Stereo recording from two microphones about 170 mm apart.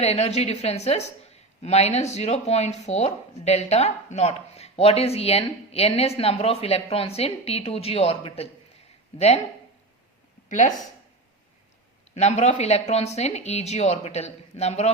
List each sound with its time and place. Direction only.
0.0 s a woman's voice: 40° left (ahead or behind)
10.5 s speech: 45° left (ahead or behind)
12.1 s a woman's voice: 40° left (ahead or behind)